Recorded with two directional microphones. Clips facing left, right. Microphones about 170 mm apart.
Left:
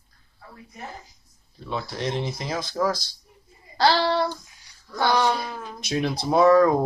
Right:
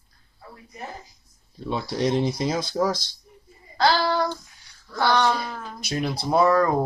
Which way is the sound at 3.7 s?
30° left (ahead or behind).